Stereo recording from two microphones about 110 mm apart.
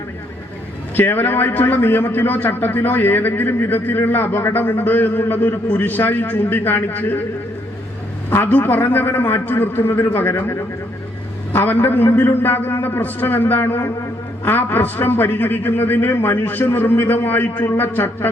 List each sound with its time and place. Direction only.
0.9 s a man's voice: 20° left (ahead or behind)
8.3 s a man's voice: 15° left (ahead or behind)